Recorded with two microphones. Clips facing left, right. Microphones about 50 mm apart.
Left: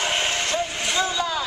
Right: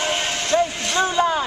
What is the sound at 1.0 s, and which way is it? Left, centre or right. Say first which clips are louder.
Vehicle: right 7 dB; right.